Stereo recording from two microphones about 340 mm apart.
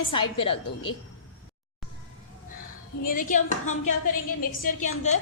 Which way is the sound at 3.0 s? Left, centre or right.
Left.